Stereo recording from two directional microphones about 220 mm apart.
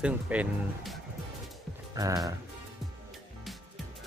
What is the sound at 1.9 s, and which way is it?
Music, 15° right (ahead or behind).